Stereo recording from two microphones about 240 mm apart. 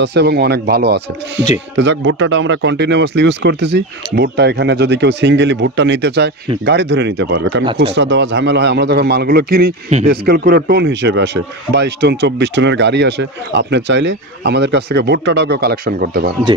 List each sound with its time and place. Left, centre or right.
0.0 s speech: right
7.6 s speech: right
7.9 s speech: right